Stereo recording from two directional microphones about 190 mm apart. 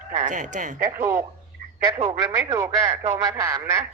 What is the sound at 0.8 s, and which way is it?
Speech, 15° right (ahead or behind).